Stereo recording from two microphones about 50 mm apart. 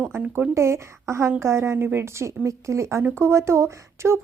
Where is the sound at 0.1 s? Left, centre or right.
Right.